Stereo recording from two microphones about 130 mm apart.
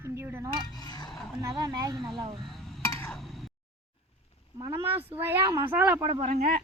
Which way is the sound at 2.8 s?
20° left (ahead or behind).